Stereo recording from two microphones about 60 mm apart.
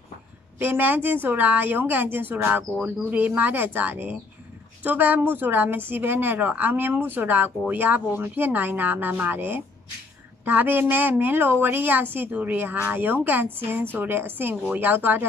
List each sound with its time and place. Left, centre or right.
0.6 s a woman's voice: right